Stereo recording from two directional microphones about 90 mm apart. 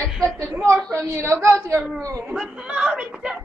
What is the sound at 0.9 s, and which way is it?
Speech, 30° right (ahead or behind).